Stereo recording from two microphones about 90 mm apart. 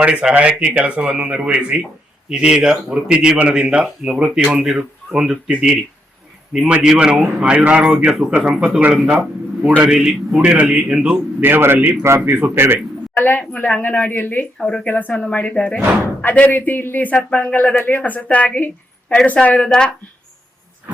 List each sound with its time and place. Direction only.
0.0 s a man's voice: 10° right (ahead or behind)
13.1 s a woman's voice: 20° left (ahead or behind)